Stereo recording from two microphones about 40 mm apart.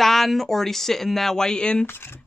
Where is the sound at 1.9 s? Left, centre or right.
Left.